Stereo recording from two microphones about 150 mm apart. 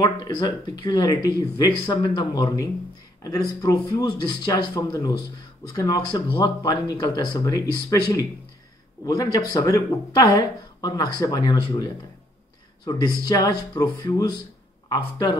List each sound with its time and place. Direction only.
0.0 s speech: 30° left (ahead or behind)
13.3 s speech: 25° left (ahead or behind)